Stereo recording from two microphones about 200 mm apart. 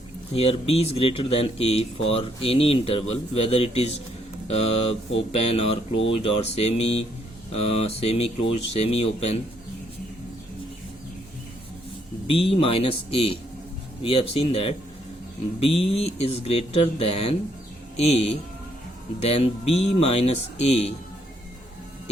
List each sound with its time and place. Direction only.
0.3 s speech: 30° left (ahead or behind)
12.3 s speech: 30° left (ahead or behind)